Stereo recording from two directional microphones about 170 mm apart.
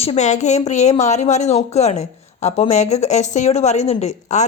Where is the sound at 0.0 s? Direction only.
40° left (ahead or behind).